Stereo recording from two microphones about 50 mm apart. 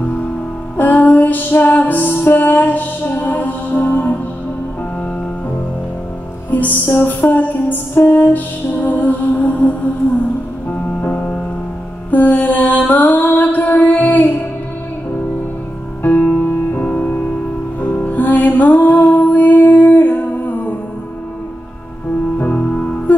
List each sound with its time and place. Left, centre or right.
0.0 s music: left
6.5 s music: left
12.1 s mantra: left
13.1 s music: left
16.0 s music: left
17.0 s music: left
22.4 s music: left